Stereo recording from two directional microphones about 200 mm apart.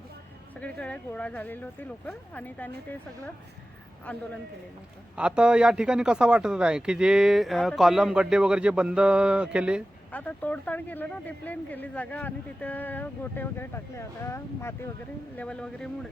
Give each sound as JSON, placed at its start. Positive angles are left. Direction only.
{"t": 0.5, "sound": "speech", "side_deg": 5}
{"t": 5.1, "sound": "a man's voice", "side_deg": -5}
{"t": 10.1, "sound": "a man's voice", "side_deg": 10}